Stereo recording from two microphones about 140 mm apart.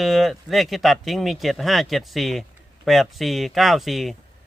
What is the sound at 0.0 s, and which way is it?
Speech, centre (ahead or behind).